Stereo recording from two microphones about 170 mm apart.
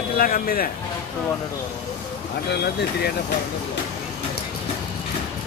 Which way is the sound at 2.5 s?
85° left.